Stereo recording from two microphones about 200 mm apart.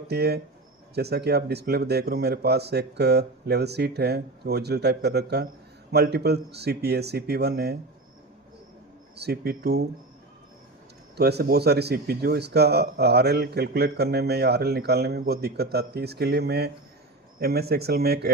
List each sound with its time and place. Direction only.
0.1 s speech: 55° right (ahead or behind)
9.1 s speech: 55° right (ahead or behind)
11.2 s speech: 55° right (ahead or behind)